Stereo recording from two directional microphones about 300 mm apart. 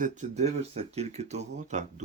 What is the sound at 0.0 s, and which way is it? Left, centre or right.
Speech, right.